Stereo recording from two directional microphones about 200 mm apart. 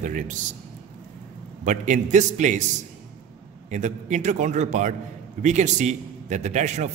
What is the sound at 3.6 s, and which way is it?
A man's voice, 35° right (ahead or behind).